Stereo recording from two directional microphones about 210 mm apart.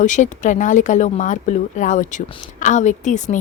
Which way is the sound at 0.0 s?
35° left (ahead or behind).